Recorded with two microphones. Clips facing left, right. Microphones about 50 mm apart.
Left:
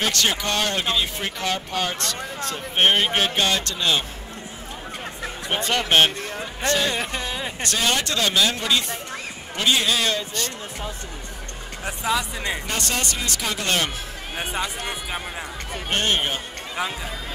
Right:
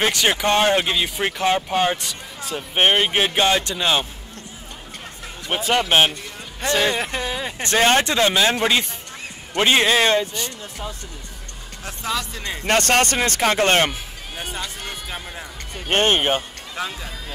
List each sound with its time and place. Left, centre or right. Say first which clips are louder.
0.4 s speech: right 7 dB; right
2.0 s speech: left 4 dB; centre
5.5 s speech: right 2 dB; centre
6.7 s speech: right 3 dB; right
7.0 s speech: right 2 dB; centre
7.6 s speech: right 7 dB; right
11.8 s speech: left 2 dB; centre
12.6 s speech: right 9 dB; right
14.3 s speech: left 3 dB; left
15.9 s speech: right 5 dB; right
16.7 s speech: left 1 dB; centre